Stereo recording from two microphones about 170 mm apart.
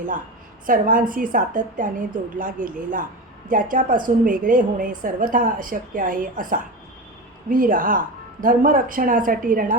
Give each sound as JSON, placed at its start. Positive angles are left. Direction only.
{"t": 0.7, "sound": "a woman's voice", "side_deg": -55}